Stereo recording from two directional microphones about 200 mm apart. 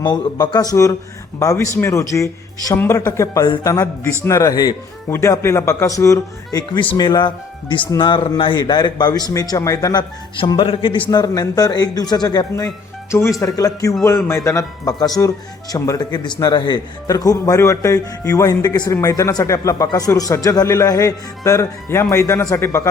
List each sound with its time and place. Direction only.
0.0 s a man's voice: 20° left (ahead or behind)